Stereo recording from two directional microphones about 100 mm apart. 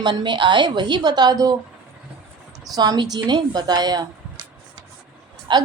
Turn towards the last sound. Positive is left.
turn(degrees=-50)  # may be behind; listen again after turning